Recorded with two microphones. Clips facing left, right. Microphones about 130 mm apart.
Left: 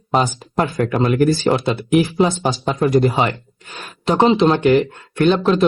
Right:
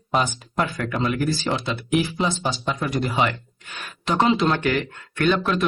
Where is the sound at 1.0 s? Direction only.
50° left (ahead or behind).